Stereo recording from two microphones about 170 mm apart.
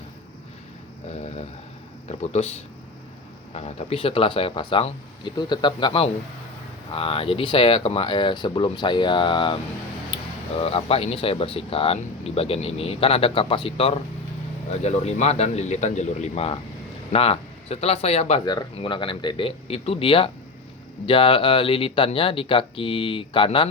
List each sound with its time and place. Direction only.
2.0 s speech: 40° left (ahead or behind)
10.1 s a sound: 30° left (ahead or behind)
10.6 s speech: 35° left (ahead or behind)
18.4 s speech: 25° left (ahead or behind)